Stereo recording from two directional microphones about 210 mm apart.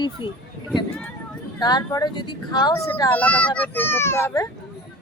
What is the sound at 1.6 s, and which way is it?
A child's voice, 20° left (ahead or behind).